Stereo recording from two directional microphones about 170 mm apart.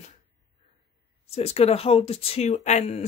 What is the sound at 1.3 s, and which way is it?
Speech, 35° left (ahead or behind).